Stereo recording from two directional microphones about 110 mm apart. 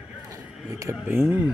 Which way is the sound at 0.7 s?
30° right (ahead or behind).